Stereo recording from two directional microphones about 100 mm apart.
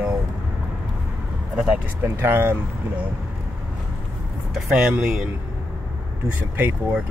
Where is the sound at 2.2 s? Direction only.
20° right (ahead or behind).